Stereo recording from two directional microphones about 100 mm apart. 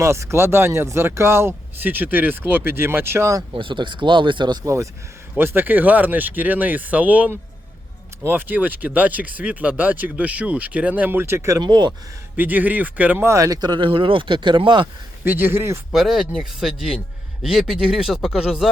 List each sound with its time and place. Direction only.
0.0 s speech: 30° right (ahead or behind)
3.5 s speech: 55° right (ahead or behind)
4.6 s speech: 30° right (ahead or behind)
5.4 s speech: 20° right (ahead or behind)
11.6 s speech: 45° right (ahead or behind)
12.4 s speech: 15° right (ahead or behind); by 14.8 s 55° right (ahead or behind)
15.2 s speech: 20° right (ahead or behind)
15.9 s speech: 5° right (ahead or behind)